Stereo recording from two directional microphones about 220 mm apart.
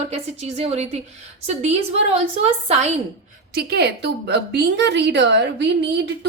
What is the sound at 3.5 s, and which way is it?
A woman's voice, 45° right (ahead or behind).